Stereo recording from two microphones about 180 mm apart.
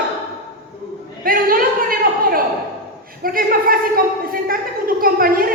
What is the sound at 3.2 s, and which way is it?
A woman's voice, 55° right (ahead or behind).